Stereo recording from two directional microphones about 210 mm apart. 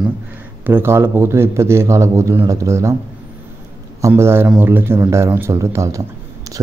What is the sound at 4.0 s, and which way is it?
Speech, 15° right (ahead or behind).